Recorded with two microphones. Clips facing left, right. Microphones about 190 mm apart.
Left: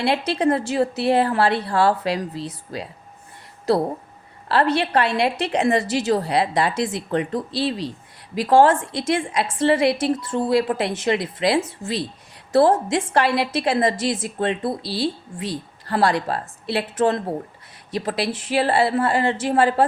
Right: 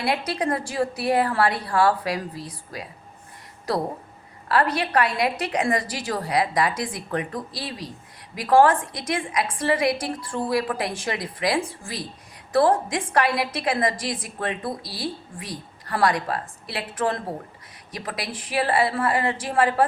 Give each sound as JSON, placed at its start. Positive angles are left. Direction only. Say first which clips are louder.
{"t": 0.0, "sound": "a woman's voice", "louder": "left 5 dB", "side_deg": 25}